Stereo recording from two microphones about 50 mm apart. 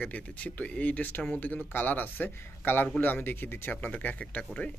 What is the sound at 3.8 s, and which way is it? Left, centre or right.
Speech, left.